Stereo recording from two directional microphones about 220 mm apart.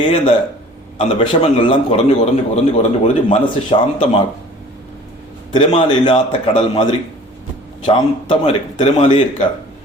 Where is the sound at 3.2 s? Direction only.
25° left (ahead or behind).